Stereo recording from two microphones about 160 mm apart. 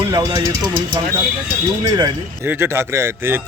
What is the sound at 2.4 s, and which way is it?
A man's voice, 15° right (ahead or behind).